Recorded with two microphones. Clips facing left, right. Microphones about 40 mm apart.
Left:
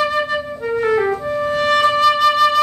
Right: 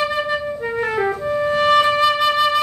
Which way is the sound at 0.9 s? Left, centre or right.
Centre.